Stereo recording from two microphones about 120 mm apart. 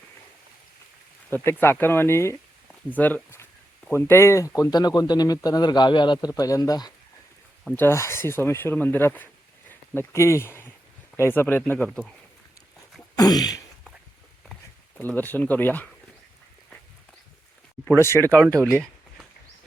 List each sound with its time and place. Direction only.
1.3 s speech: 20° left (ahead or behind); by 6.9 s 35° left (ahead or behind)
7.8 s speech: 20° left (ahead or behind)
13.1 s speech: 35° left (ahead or behind)
14.5 s speech: 15° left (ahead or behind)
17.8 s speech: 20° left (ahead or behind)